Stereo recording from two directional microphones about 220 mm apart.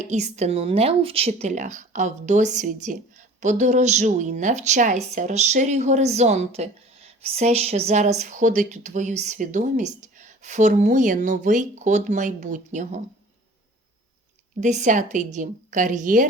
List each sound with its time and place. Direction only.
0.0 s speech: 30° right (ahead or behind)
14.6 s speech: 35° right (ahead or behind)